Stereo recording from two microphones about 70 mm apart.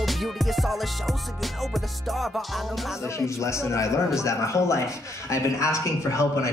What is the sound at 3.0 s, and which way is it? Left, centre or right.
A man's voice, left.